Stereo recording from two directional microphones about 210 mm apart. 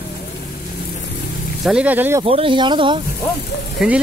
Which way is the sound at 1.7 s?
5° right (ahead or behind).